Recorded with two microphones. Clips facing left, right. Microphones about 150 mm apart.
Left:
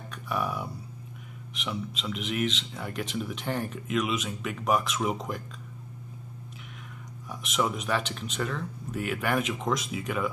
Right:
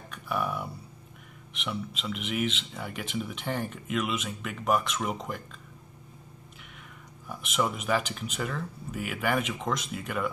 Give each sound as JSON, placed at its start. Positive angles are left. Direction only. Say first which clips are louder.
{"t": 0.1, "sound": "a sound", "louder": "even", "side_deg": 0}
{"t": 1.5, "sound": "speech", "louder": "even", "side_deg": 0}
{"t": 7.2, "sound": "speech", "louder": "even", "side_deg": 0}